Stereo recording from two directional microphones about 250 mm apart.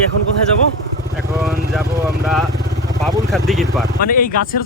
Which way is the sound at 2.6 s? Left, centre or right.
Right.